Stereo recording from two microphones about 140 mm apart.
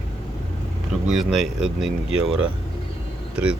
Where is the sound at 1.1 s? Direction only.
Centre (ahead or behind).